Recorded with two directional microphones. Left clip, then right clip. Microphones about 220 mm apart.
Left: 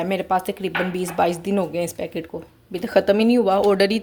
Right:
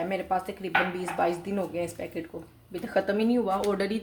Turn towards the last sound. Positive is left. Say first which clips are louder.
# left 10 dB
turn(degrees=45)  # may be behind; listen again after turning